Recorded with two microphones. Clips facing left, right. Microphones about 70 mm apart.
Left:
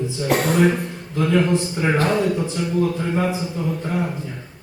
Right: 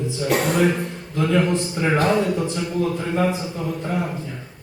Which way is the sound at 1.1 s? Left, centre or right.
Centre.